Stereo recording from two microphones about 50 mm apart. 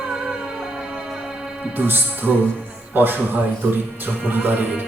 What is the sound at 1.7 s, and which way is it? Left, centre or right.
Speech, right.